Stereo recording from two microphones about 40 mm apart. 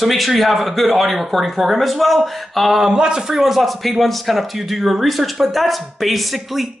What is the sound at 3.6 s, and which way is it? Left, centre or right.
A man's voice, centre.